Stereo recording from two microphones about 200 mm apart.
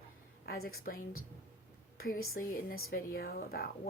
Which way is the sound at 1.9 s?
45° left (ahead or behind).